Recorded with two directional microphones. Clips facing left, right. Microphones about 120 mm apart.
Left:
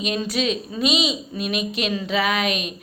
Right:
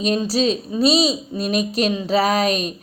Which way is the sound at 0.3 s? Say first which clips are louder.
Right 4 dB; 35° right (ahead or behind).